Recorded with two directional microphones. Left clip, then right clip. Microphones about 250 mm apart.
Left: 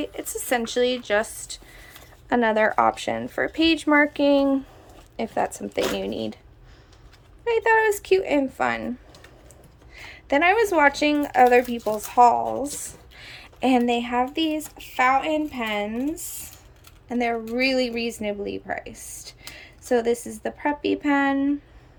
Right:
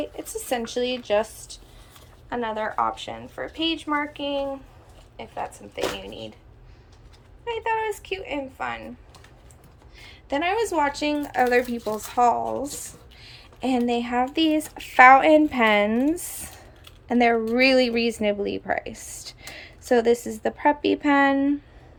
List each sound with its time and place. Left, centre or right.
0.0 s a woman's voice: centre
2.3 s a woman's voice: centre
4.2 s speech: left
5.2 s a woman's voice: left
6.0 s speech: left
7.4 s a woman's voice: left
9.9 s a woman's voice: centre